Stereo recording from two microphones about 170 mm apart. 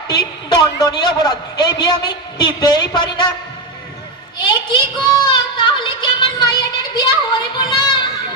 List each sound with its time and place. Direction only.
0.1 s a woman's voice: 25° left (ahead or behind)
4.4 s a woman's voice: 25° left (ahead or behind)
5.1 s a sound: 25° left (ahead or behind)